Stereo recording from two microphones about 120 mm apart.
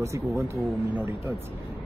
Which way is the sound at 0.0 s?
25° right (ahead or behind).